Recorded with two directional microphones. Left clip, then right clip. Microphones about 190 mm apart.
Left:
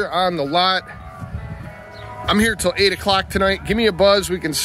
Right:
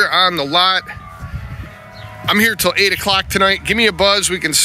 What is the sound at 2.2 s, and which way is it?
Speech, 5° left (ahead or behind).